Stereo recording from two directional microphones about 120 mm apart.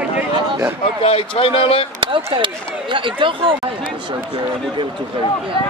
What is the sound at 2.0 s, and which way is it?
Speech, 45° right (ahead or behind).